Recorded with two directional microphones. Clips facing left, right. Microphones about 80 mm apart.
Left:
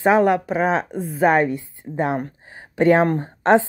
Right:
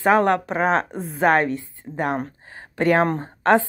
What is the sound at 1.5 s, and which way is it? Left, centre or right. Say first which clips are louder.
A woman's voice: left 1 dB; centre.